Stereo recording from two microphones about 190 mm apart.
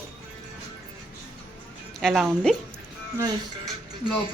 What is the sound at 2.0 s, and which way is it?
Speech, centre (ahead or behind).